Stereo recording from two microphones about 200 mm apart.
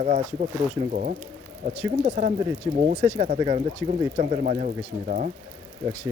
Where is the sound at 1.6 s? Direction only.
40° right (ahead or behind).